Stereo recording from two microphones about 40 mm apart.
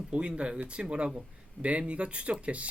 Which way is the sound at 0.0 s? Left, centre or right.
Right.